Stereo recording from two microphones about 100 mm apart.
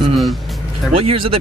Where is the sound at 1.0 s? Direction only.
65° right (ahead or behind).